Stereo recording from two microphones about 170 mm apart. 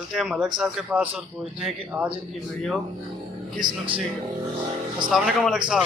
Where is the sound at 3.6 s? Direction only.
25° right (ahead or behind).